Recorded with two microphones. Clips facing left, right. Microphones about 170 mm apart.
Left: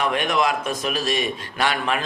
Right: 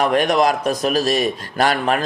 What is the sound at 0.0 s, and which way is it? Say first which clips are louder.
A man's voice: right 6 dB; 40° right (ahead or behind).